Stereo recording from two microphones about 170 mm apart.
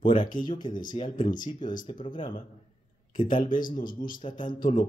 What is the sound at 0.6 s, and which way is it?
Speech, 25° left (ahead or behind).